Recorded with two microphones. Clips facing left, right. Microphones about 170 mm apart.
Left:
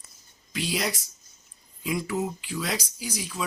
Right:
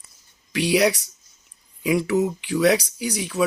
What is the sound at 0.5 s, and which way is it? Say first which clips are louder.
Speech: right 10 dB; 70° right (ahead or behind).